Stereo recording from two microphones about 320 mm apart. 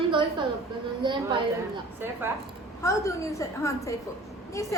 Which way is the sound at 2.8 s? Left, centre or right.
Centre.